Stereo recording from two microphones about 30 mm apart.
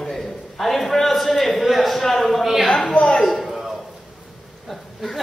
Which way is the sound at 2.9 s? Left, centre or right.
Left.